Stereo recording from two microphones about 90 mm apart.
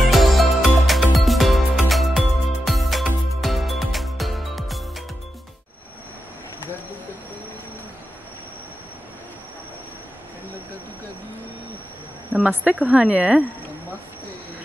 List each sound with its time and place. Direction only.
0.0 s music: centre (ahead or behind)
12.3 s a woman's voice: 15° right (ahead or behind)